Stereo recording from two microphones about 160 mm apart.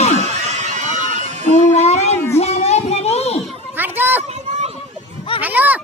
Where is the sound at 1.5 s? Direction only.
40° left (ahead or behind).